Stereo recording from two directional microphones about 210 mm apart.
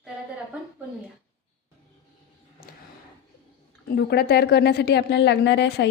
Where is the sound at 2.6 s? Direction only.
45° left (ahead or behind).